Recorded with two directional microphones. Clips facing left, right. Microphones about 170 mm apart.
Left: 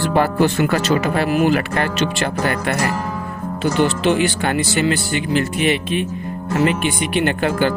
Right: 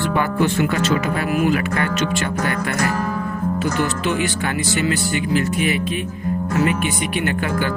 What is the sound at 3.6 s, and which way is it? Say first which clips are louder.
Speech: left 7 dB; 30° left (ahead or behind).